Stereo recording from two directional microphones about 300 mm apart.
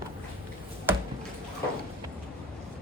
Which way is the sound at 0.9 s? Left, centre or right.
Centre.